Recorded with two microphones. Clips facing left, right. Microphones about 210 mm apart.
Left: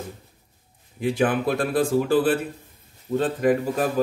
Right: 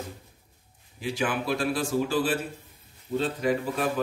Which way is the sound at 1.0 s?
55° left (ahead or behind).